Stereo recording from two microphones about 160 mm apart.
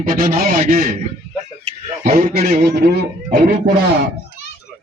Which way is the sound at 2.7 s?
75° right (ahead or behind).